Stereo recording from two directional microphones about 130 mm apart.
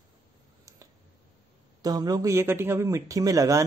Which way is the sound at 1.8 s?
30° right (ahead or behind).